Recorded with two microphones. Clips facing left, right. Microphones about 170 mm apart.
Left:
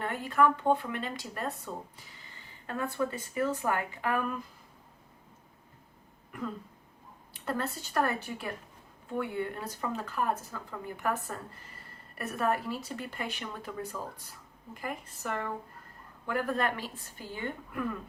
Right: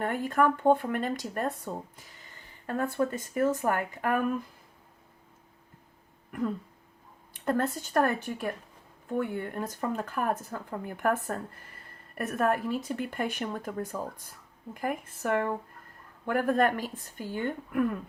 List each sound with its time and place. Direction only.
0.0 s speech: 45° right (ahead or behind)
7.4 s a woman's voice: 50° right (ahead or behind)